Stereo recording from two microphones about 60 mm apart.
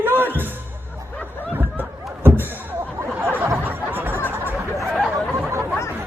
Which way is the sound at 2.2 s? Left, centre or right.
Right.